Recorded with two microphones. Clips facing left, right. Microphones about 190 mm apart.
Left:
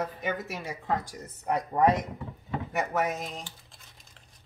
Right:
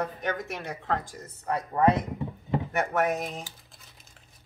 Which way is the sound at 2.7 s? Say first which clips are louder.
Right 2 dB; centre (ahead or behind).